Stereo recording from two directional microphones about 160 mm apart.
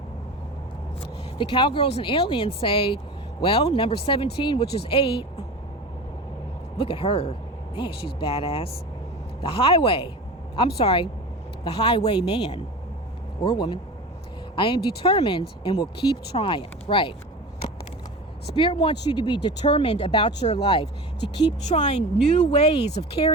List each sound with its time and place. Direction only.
1.4 s speech: 30° left (ahead or behind)
6.7 s speech: 35° left (ahead or behind)
18.4 s speech: 35° left (ahead or behind)
21.7 s speech: 45° left (ahead or behind)